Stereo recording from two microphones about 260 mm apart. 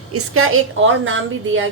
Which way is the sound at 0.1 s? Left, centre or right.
Right.